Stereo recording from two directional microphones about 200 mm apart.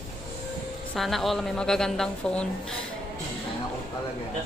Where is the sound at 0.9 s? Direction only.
Centre (ahead or behind).